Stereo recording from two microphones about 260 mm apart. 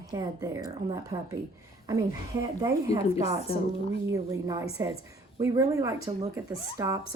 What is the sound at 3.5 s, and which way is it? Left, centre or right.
Speech, left.